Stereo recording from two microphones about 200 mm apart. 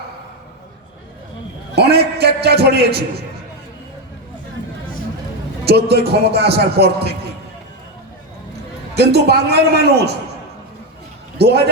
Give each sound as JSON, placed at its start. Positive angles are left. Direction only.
{"t": 1.7, "sound": "a sound", "side_deg": -55}
{"t": 5.6, "sound": "speech", "side_deg": -55}
{"t": 9.0, "sound": "a man's voice", "side_deg": -55}
{"t": 11.3, "sound": "a man's voice", "side_deg": -55}